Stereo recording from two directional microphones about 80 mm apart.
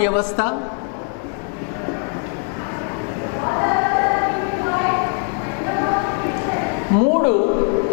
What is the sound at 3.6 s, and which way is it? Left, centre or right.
Choir, centre.